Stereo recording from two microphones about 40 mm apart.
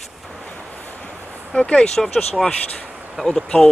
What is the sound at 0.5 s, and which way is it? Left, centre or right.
Waves, left.